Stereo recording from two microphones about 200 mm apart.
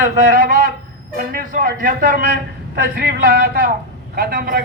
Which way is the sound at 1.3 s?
45° right (ahead or behind).